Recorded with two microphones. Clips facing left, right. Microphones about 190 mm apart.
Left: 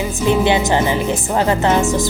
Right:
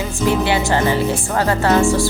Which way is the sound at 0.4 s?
20° left (ahead or behind).